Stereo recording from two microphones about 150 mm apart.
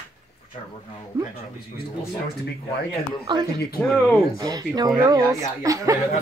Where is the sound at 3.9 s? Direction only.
15° left (ahead or behind).